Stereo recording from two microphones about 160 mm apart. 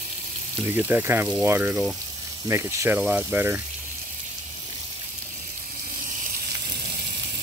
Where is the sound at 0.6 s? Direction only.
15° right (ahead or behind).